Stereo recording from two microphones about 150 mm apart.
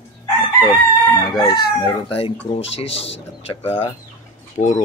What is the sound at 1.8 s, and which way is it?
Speech, 40° left (ahead or behind).